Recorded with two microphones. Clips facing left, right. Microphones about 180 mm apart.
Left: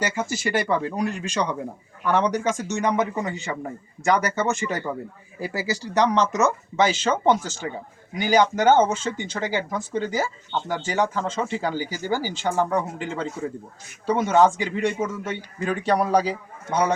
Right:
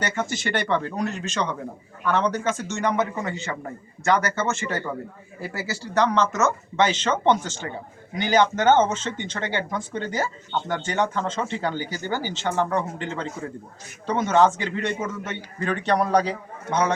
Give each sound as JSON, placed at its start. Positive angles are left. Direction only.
{"t": 0.0, "sound": "speech", "side_deg": 5}